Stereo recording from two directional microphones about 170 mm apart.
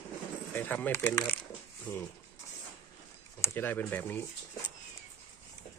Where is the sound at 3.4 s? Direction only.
15° left (ahead or behind).